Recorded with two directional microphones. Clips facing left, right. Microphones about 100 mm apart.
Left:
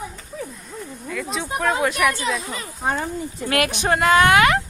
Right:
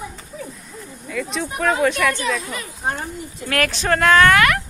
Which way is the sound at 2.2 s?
25° left (ahead or behind).